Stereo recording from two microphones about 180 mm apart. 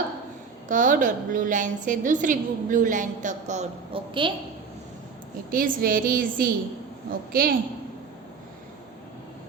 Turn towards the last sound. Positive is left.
turn(degrees=-55)  # may be behind; listen again after turning